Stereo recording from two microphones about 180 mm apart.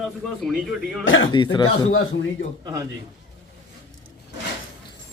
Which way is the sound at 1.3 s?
25° left (ahead or behind).